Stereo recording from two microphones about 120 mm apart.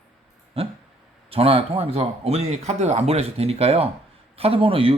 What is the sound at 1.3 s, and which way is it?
A man's voice, 55° right (ahead or behind).